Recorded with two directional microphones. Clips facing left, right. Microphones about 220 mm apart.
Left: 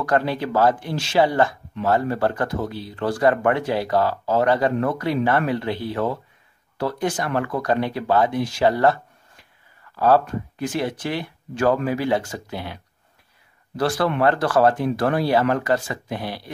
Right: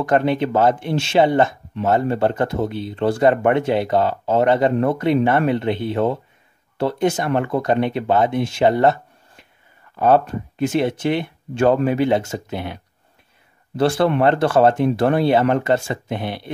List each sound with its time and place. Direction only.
0.0 s speech: 20° right (ahead or behind)